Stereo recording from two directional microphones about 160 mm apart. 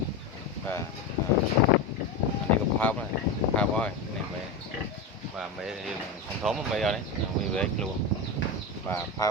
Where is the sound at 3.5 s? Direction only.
5° left (ahead or behind).